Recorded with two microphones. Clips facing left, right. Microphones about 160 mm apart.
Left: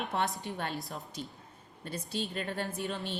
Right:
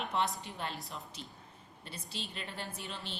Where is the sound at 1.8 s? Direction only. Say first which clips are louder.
Left 9 dB; 45° left (ahead or behind).